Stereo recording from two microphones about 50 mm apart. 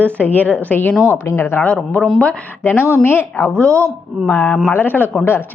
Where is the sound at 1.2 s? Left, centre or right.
Left.